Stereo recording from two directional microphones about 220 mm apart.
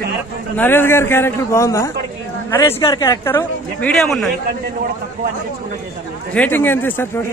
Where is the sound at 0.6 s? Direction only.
10° left (ahead or behind).